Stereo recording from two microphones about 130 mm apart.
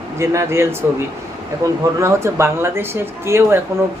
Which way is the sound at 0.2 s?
20° right (ahead or behind).